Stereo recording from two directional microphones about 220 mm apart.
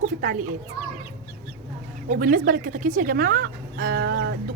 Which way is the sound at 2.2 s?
40° right (ahead or behind).